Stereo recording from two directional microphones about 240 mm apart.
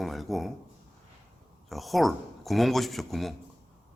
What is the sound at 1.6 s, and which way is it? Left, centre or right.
A man's voice, centre.